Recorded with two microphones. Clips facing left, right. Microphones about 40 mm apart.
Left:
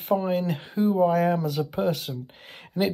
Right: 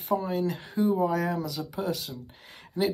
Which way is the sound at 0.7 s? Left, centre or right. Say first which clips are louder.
Left 4 dB; left.